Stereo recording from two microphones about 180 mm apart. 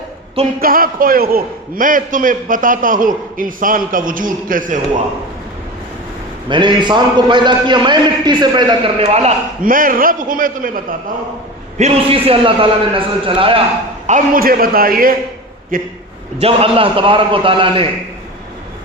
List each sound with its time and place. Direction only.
0.6 s a man's voice: 55° right (ahead or behind)
6.5 s a man's voice: 25° right (ahead or behind)
9.6 s a man's voice: 50° right (ahead or behind)
11.8 s a man's voice: 30° right (ahead or behind)
14.1 s a man's voice: 55° right (ahead or behind)
16.4 s a man's voice: 30° right (ahead or behind)